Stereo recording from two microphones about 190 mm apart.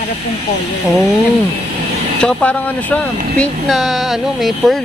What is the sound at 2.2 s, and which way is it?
Speech, 5° left (ahead or behind).